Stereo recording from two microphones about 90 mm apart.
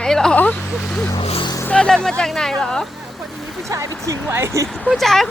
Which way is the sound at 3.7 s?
40° right (ahead or behind).